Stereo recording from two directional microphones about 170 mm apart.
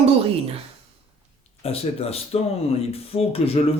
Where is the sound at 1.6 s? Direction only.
35° left (ahead or behind).